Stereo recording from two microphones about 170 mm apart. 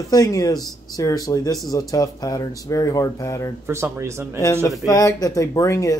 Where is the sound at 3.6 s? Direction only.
15° right (ahead or behind).